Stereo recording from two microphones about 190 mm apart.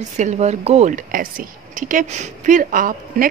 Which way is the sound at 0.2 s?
35° right (ahead or behind).